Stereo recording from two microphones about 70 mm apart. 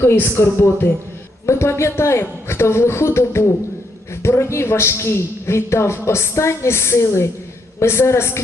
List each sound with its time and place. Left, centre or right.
0.3 s a woman's voice: left